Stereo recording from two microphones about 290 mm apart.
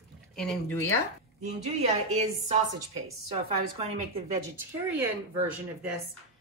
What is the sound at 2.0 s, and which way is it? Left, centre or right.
Speech, right.